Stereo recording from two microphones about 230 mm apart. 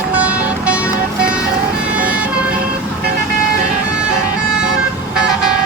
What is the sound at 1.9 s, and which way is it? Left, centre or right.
Emergency vehicle, centre.